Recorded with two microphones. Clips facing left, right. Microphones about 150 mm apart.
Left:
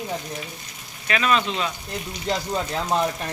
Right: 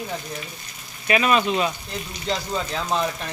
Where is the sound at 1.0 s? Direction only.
10° right (ahead or behind).